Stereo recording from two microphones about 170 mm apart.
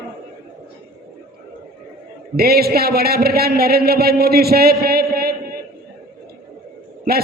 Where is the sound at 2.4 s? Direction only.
65° right (ahead or behind).